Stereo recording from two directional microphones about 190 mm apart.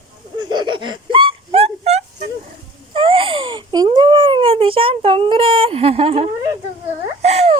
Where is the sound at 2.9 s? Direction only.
25° right (ahead or behind).